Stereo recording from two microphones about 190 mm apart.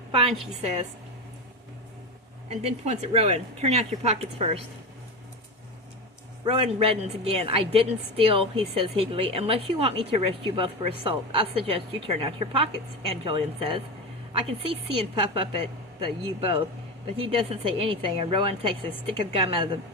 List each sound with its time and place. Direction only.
0.1 s a woman's voice: 30° right (ahead or behind)
2.5 s speech: 35° right (ahead or behind)
6.4 s a woman's voice: 25° right (ahead or behind)